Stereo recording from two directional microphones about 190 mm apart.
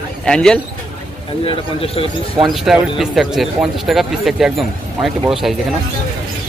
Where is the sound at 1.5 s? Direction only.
30° left (ahead or behind).